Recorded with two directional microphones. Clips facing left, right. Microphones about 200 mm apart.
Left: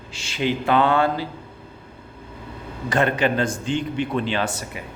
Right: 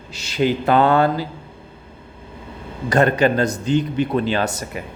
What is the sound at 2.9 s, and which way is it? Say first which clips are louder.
A man's voice: right 4 dB; 40° right (ahead or behind).